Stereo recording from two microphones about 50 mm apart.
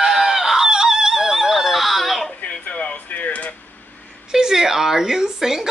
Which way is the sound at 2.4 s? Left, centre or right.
Left.